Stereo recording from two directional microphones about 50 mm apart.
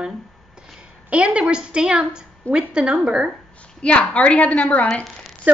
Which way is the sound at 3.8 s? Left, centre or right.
Left.